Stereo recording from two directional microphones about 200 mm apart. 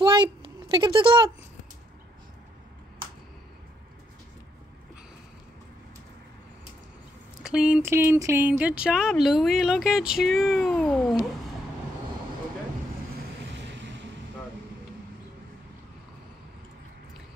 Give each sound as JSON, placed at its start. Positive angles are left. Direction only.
{"t": 0.0, "sound": "a sound", "side_deg": -25}
{"t": 7.4, "sound": "speech", "side_deg": -5}
{"t": 13.4, "sound": "vehicle", "side_deg": -60}